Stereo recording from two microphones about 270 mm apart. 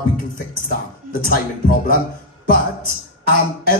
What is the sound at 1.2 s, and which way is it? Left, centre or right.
Speech, left.